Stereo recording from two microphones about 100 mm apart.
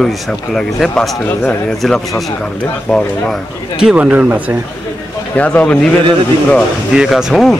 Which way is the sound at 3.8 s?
10° right (ahead or behind).